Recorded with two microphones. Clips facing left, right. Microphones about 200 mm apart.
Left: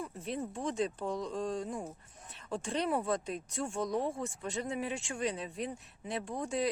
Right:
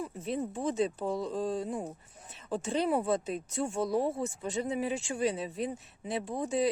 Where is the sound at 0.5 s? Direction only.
5° right (ahead or behind).